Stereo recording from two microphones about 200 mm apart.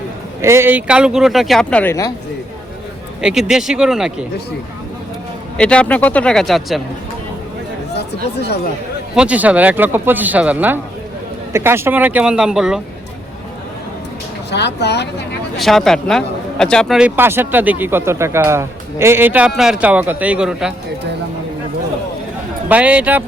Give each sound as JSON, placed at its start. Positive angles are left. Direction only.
{"t": 0.4, "sound": "speech", "side_deg": -10}
{"t": 3.2, "sound": "speech", "side_deg": -5}
{"t": 5.5, "sound": "speech", "side_deg": 5}
{"t": 7.9, "sound": "speech", "side_deg": 55}
{"t": 9.1, "sound": "speech", "side_deg": -5}
{"t": 14.5, "sound": "speech", "side_deg": 55}
{"t": 15.5, "sound": "speech", "side_deg": 0}
{"t": 22.7, "sound": "speech", "side_deg": -5}